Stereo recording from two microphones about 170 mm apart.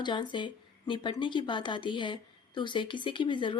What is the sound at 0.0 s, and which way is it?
Speech, 25° left (ahead or behind).